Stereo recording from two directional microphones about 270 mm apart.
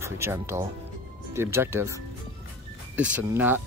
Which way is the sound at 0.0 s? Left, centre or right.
Centre.